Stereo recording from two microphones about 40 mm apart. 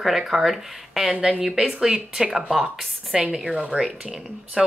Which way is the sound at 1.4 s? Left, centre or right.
Centre.